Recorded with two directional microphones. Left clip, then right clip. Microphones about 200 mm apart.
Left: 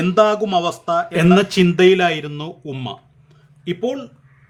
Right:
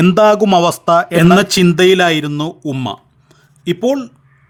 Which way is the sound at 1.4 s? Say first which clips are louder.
Right 3 dB; 30° right (ahead or behind).